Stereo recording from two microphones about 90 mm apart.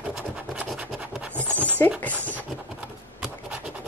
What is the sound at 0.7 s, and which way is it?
Scratch, 15° right (ahead or behind).